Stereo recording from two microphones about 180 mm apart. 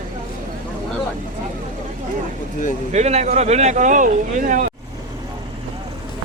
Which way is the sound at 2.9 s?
35° right (ahead or behind).